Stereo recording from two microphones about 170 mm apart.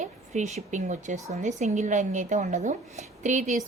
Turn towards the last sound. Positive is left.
turn(degrees=-45)  # may be behind; listen again after turning